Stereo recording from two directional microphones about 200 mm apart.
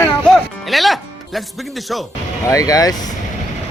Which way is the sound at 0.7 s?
Centre (ahead or behind).